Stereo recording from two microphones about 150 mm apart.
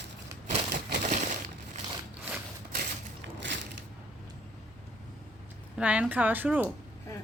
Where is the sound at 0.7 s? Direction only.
55° right (ahead or behind).